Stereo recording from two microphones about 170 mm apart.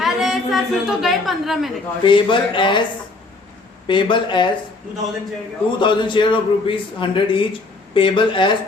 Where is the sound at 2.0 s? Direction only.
30° left (ahead or behind).